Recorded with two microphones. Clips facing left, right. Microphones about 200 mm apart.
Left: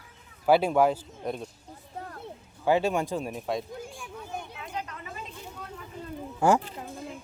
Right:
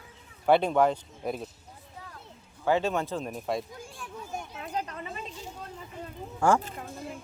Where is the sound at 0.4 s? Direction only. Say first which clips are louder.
Left 1 dB; 5° left (ahead or behind).